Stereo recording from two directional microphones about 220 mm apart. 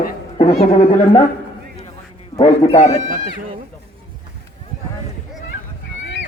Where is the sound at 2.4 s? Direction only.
30° left (ahead or behind).